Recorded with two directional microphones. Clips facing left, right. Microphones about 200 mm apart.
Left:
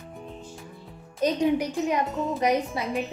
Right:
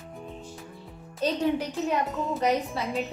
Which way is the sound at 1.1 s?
15° left (ahead or behind).